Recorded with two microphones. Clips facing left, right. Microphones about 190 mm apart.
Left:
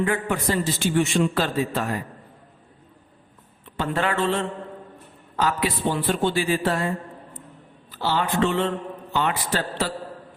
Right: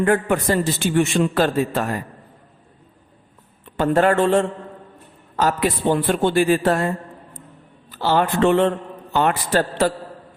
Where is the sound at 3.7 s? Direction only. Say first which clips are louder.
Right 8 dB; 45° right (ahead or behind).